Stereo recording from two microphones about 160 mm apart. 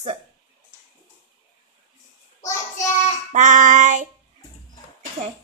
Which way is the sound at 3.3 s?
50° right (ahead or behind).